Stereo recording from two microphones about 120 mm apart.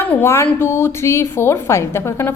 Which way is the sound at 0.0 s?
15° left (ahead or behind).